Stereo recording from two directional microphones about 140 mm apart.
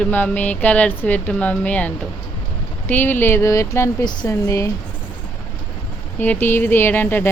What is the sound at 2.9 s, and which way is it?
Speech, 15° left (ahead or behind).